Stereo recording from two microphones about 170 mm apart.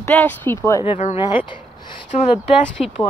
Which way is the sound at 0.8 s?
35° left (ahead or behind).